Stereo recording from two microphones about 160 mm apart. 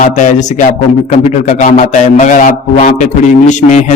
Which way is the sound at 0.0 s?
50° left (ahead or behind).